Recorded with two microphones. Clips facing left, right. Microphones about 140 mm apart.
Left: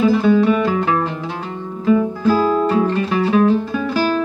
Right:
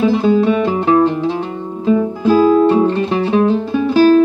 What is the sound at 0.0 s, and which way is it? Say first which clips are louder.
Music: right 1 dB; 25° right (ahead or behind).